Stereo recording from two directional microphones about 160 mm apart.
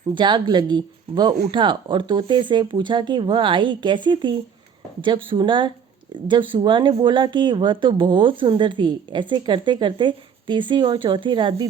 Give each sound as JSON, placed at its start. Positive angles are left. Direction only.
{"t": 0.1, "sound": "a woman's voice", "side_deg": -30}